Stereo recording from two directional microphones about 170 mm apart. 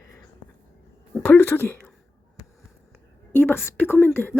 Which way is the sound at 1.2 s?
15° left (ahead or behind).